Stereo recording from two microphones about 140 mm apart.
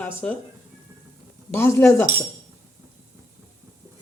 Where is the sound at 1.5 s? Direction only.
20° left (ahead or behind).